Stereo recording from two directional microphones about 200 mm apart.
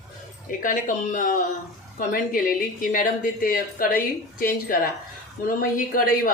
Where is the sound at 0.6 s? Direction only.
40° left (ahead or behind).